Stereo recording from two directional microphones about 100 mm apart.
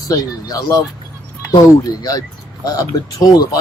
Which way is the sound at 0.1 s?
35° left (ahead or behind).